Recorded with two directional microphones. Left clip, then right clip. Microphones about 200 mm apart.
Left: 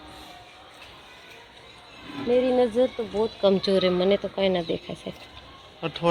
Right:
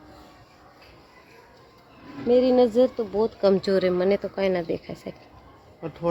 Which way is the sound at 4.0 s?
5° right (ahead or behind).